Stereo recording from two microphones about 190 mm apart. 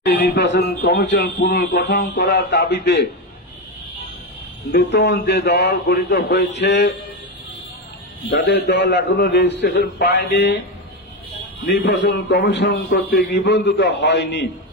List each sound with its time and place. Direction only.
0.0 s a man's voice: 55° left (ahead or behind)
4.7 s a man's voice: 60° left (ahead or behind)
8.3 s a man's voice: 60° left (ahead or behind)
11.6 s a man's voice: 60° left (ahead or behind)